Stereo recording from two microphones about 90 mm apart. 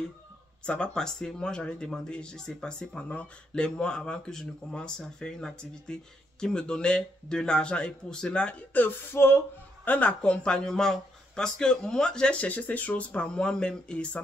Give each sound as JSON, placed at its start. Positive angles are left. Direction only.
{"t": 0.7, "sound": "speech", "side_deg": 10}
{"t": 8.8, "sound": "a sound", "side_deg": 25}
{"t": 9.8, "sound": "speech", "side_deg": 15}